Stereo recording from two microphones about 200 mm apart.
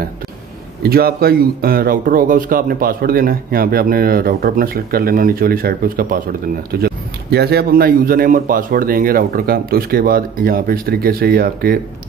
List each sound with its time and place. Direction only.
0.8 s speech: 50° right (ahead or behind)